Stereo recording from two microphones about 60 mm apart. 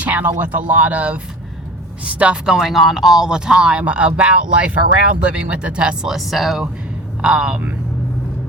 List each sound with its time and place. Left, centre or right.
0.0 s a sound: right
0.3 s speech: right
2.6 s speech: centre
6.1 s speech: centre